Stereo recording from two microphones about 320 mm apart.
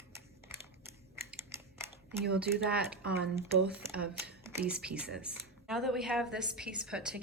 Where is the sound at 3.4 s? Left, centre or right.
Centre.